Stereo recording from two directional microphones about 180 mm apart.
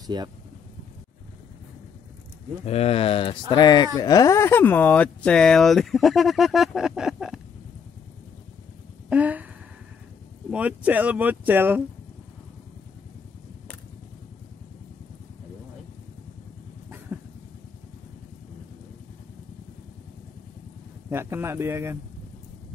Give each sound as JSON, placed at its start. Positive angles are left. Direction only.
{"t": 0.0, "sound": "speech", "side_deg": -25}
{"t": 2.6, "sound": "speech", "side_deg": 35}
{"t": 9.1, "sound": "speech", "side_deg": -10}
{"t": 10.5, "sound": "speech", "side_deg": -10}
{"t": 17.1, "sound": "vehicle", "side_deg": -10}
{"t": 21.1, "sound": "speech", "side_deg": -15}